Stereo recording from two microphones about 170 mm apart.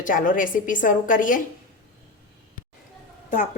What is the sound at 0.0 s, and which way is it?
A woman's voice, 50° left (ahead or behind).